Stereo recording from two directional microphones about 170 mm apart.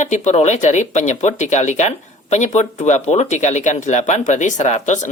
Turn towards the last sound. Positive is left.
turn(degrees=45)  # may be behind; listen again after turning